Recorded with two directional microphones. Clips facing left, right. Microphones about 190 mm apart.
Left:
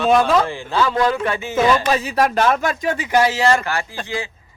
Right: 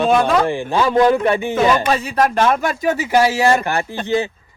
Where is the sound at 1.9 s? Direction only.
5° left (ahead or behind).